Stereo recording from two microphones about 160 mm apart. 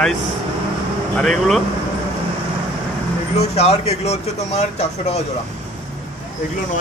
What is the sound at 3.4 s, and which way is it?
Speech, 40° left (ahead or behind).